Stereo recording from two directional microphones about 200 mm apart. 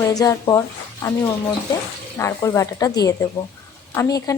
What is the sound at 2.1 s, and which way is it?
A woman's voice, 15° left (ahead or behind).